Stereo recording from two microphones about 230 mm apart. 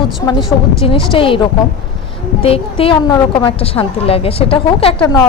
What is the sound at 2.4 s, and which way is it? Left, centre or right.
A woman's voice, left.